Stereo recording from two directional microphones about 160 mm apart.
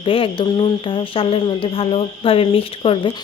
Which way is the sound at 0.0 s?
35° left (ahead or behind).